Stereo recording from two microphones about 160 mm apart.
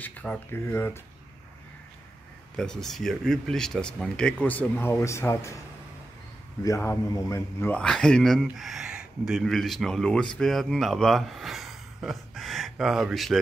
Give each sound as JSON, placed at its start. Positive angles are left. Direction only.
{"t": 0.0, "sound": "speech", "side_deg": 10}
{"t": 2.5, "sound": "speech", "side_deg": 5}
{"t": 6.6, "sound": "a man's voice", "side_deg": 15}
{"t": 7.7, "sound": "speech", "side_deg": 5}